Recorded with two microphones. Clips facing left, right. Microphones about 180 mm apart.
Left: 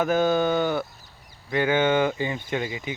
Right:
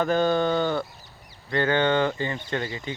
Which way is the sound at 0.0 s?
5° left (ahead or behind).